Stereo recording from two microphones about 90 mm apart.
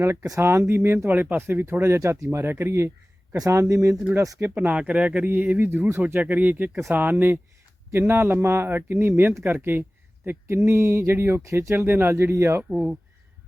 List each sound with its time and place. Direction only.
0.0 s speech: 25° right (ahead or behind)
4.5 s speech: 15° right (ahead or behind)